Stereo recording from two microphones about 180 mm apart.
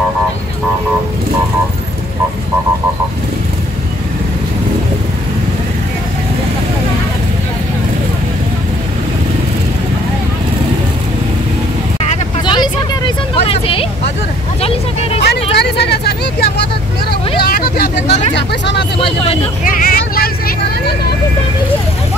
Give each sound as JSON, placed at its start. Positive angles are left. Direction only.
{"t": 12.4, "sound": "vehicle", "side_deg": 25}
{"t": 15.6, "sound": "vehicle", "side_deg": 65}
{"t": 18.3, "sound": "vehicle", "side_deg": 75}
{"t": 18.9, "sound": "vehicle", "side_deg": 30}
{"t": 19.6, "sound": "vehicle", "side_deg": 50}